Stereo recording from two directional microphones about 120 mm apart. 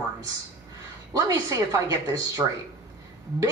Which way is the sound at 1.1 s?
30° right (ahead or behind).